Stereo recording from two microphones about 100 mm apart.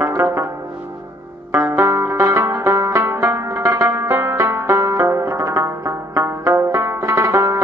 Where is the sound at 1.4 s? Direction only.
25° right (ahead or behind).